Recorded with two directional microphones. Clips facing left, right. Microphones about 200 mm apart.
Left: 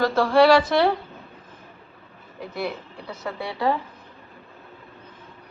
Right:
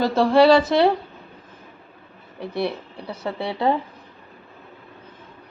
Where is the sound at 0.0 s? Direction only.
25° right (ahead or behind).